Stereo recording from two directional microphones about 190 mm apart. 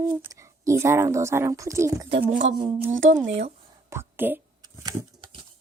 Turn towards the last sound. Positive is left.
turn(degrees=-20)  # may be behind; listen again after turning